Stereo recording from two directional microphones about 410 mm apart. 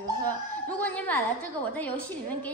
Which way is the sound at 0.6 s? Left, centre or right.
Centre.